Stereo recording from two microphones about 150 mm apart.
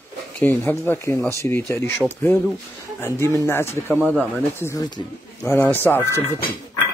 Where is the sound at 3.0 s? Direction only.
20° left (ahead or behind).